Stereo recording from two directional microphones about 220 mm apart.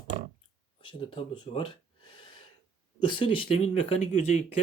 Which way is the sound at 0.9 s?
25° left (ahead or behind).